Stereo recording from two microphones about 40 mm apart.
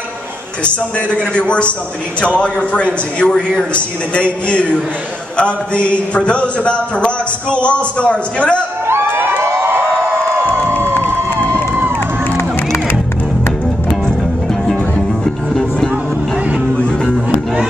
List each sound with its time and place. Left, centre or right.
0.9 s a man's voice: left
8.8 s crowd: right
9.6 s a sound: right